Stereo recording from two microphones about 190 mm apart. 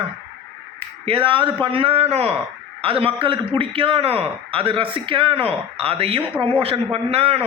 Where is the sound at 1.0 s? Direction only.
30° right (ahead or behind).